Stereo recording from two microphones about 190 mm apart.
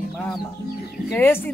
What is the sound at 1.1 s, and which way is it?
Music, 10° left (ahead or behind).